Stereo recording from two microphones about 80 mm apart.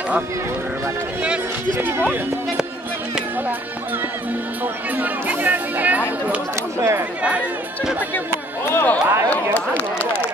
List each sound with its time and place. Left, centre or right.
1.8 s speech: right
4.9 s speech: centre
6.8 s speech: right
7.2 s speech: centre
8.7 s speech: left